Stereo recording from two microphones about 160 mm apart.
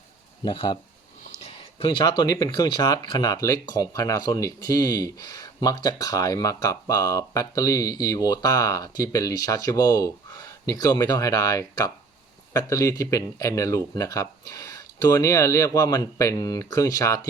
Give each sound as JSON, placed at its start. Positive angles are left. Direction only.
{"t": 0.4, "sound": "speech", "side_deg": 30}